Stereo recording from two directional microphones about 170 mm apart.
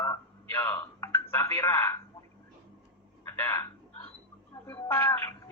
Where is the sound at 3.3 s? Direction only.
15° left (ahead or behind).